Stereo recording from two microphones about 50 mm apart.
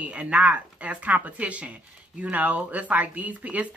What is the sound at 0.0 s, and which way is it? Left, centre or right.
A woman's voice, right.